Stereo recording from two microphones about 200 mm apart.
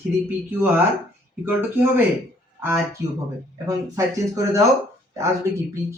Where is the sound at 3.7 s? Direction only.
15° right (ahead or behind).